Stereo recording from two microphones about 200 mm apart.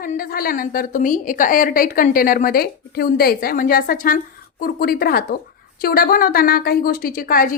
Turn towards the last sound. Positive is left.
turn(degrees=45)  # may be behind; listen again after turning